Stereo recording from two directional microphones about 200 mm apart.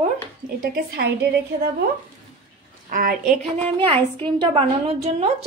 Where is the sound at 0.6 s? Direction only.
55° right (ahead or behind).